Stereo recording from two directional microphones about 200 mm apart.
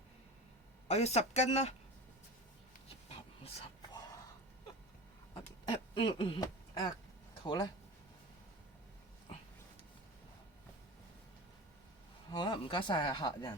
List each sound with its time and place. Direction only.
0.9 s speech: 35° left (ahead or behind)
2.9 s a sound: 30° left (ahead or behind)
5.9 s speech: 25° left (ahead or behind)
12.3 s speech: 25° left (ahead or behind)